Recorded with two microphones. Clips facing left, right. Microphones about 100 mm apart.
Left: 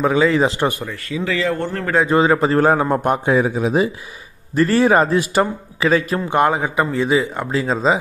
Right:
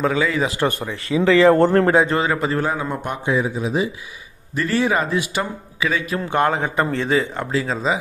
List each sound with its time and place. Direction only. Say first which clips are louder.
0.0 s speech: left 4 dB; 25° left (ahead or behind)
1.0 s speech: right 8 dB; 30° right (ahead or behind)
1.6 s speech: right 9 dB; 50° right (ahead or behind)
2.0 s speech: left 5 dB; 20° left (ahead or behind)
2.6 s speech: left 8 dB; 50° left (ahead or behind)
4.6 s a man's voice: left 6 dB; 40° left (ahead or behind)
6.2 s speech: left 2 dB; 20° left (ahead or behind)
7.6 s speech: left 4 dB; 30° left (ahead or behind)